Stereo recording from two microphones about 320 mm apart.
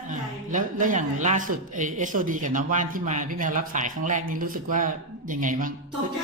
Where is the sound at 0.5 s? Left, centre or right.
Right.